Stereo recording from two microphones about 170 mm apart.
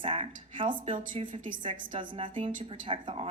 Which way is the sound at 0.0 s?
30° right (ahead or behind).